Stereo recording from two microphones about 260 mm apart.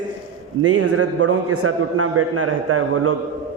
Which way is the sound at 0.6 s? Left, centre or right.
Right.